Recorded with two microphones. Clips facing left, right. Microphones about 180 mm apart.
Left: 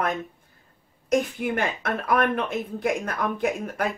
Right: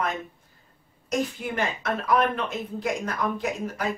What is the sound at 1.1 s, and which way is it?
Speech, 55° left (ahead or behind).